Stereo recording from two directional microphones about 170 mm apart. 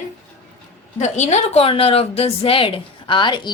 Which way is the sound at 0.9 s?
45° left (ahead or behind).